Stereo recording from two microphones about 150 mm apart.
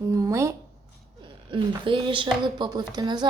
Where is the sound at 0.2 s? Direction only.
20° right (ahead or behind).